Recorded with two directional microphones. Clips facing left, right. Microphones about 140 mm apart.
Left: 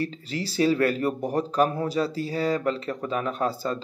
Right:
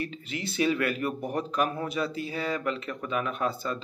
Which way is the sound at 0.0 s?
35° left (ahead or behind).